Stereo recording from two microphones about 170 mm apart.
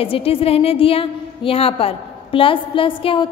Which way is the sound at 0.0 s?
35° left (ahead or behind).